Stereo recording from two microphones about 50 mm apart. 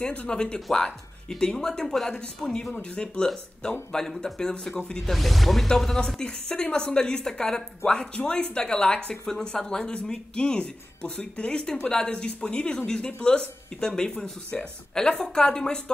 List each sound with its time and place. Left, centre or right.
0.0 s speech: left
2.8 s speech: centre
3.9 s speech: centre
5.1 s speech: centre